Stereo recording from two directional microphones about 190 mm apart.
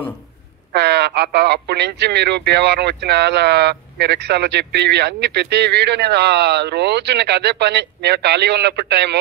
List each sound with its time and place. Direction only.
0.7 s speech: 60° right (ahead or behind)